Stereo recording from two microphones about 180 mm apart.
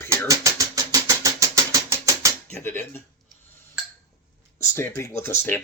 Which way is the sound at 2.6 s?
10° left (ahead or behind).